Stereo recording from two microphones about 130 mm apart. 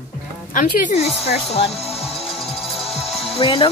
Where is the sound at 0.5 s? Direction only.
90° left.